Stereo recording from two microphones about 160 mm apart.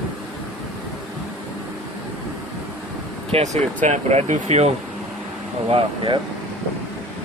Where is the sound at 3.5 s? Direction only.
45° right (ahead or behind).